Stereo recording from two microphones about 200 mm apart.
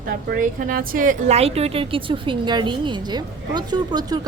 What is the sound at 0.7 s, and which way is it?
A woman's voice, 45° right (ahead or behind).